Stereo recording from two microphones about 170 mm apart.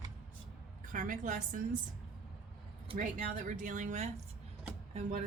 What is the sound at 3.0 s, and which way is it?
Speech, 50° right (ahead or behind).